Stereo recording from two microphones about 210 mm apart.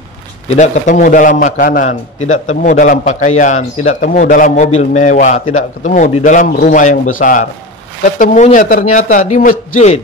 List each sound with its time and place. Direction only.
0.6 s a man's voice: 35° left (ahead or behind)